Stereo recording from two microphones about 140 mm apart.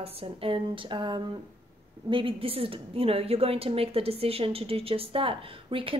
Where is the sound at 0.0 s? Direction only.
40° right (ahead or behind).